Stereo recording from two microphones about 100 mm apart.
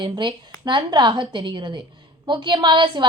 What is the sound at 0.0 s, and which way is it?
A woman's voice, 50° right (ahead or behind).